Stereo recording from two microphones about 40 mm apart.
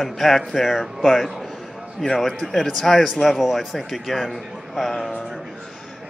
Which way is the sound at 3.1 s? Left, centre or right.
Centre.